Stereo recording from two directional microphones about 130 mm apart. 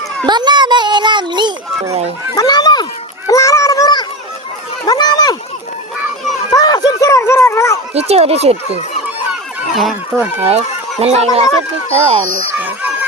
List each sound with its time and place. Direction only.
0.3 s a child's voice: 35° right (ahead or behind)
1.9 s speech: 55° right (ahead or behind)
2.3 s speech: 30° left (ahead or behind)
3.2 s a sound: 25° left (ahead or behind)
6.5 s run: 30° left (ahead or behind)
7.9 s speech: 55° right (ahead or behind)
9.0 s goose: centre (ahead or behind)
10.1 s speech: 5° left (ahead or behind)
11.0 s speech: 55° right (ahead or behind)
12.5 s a sound: 15° right (ahead or behind)